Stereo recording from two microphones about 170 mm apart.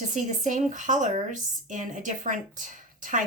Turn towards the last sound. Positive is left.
turn(degrees=-50)  # may be behind; listen again after turning